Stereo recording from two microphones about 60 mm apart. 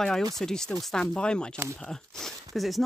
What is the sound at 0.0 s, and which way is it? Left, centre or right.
Speech, centre.